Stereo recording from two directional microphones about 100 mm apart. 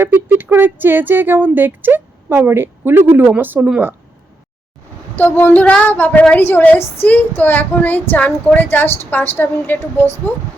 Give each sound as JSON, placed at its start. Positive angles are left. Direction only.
{"t": 0.0, "sound": "speech", "side_deg": -20}
{"t": 5.1, "sound": "a woman's voice", "side_deg": 20}